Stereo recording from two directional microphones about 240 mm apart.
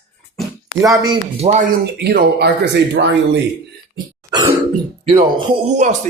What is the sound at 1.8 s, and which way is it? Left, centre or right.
Speech, right.